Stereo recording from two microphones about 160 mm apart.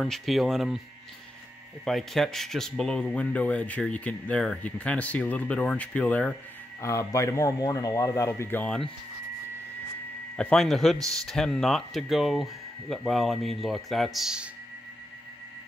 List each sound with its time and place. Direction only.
0.0 s a man's voice: centre (ahead or behind)
1.9 s speech: centre (ahead or behind)
10.3 s a man's voice: 5° left (ahead or behind)